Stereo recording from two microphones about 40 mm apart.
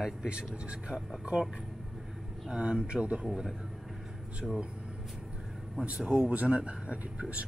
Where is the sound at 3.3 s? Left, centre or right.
Centre.